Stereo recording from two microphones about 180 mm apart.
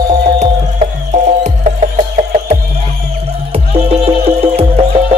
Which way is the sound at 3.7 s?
35° right (ahead or behind).